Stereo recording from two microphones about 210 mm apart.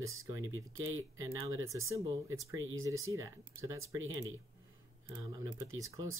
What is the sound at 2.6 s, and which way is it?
Speech, 70° right (ahead or behind).